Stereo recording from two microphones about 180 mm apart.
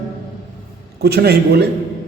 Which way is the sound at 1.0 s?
60° right (ahead or behind).